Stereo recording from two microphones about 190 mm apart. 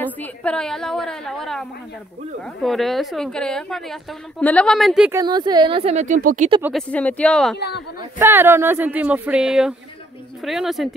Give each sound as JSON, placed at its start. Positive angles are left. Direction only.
{"t": 0.0, "sound": "a woman's voice", "side_deg": 5}
{"t": 5.1, "sound": "speech", "side_deg": -20}
{"t": 6.7, "sound": "a woman's voice", "side_deg": 5}
{"t": 7.5, "sound": "speech", "side_deg": 60}
{"t": 8.0, "sound": "a woman's voice", "side_deg": -10}